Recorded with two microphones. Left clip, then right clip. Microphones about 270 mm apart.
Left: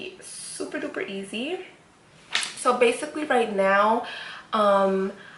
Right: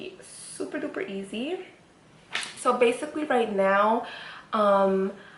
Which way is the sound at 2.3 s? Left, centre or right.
Centre.